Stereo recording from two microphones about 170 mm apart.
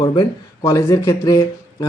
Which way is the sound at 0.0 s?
25° left (ahead or behind).